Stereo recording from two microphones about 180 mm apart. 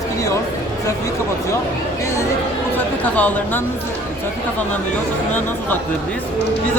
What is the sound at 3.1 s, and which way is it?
Speech, 10° left (ahead or behind).